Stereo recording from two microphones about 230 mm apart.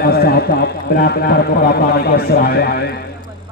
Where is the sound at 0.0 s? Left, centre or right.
Left.